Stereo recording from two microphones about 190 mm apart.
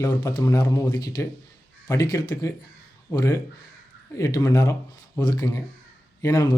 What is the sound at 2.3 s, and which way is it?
Speech, 15° left (ahead or behind).